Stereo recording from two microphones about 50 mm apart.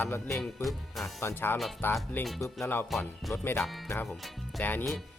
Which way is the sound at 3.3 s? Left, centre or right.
Left.